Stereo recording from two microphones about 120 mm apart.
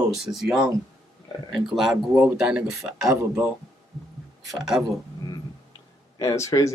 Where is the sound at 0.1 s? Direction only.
Centre (ahead or behind).